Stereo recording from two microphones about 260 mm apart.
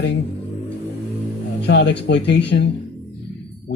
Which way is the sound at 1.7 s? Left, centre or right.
Left.